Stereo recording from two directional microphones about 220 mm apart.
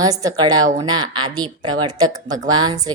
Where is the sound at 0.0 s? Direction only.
15° right (ahead or behind).